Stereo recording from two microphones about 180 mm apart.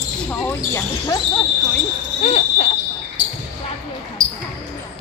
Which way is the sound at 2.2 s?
40° left (ahead or behind).